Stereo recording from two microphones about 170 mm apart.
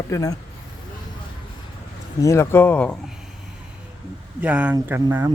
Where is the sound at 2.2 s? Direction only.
15° left (ahead or behind).